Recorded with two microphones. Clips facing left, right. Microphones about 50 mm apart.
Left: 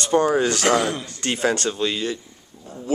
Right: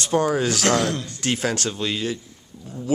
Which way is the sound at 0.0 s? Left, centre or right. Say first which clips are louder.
Left 2 dB; centre.